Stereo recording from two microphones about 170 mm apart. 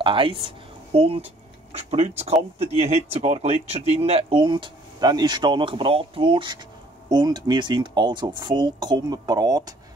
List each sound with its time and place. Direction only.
0.0 s speech: 30° right (ahead or behind)